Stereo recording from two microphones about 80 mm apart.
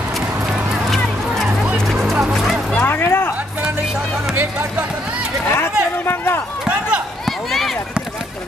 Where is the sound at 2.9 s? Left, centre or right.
Left.